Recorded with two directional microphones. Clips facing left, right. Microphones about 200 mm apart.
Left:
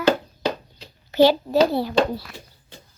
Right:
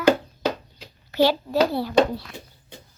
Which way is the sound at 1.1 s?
20° left (ahead or behind).